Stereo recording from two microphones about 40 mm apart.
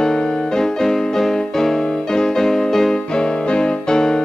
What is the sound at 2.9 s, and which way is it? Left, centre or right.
Music, left.